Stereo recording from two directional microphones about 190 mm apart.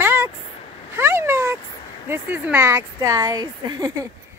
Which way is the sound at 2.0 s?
10° right (ahead or behind).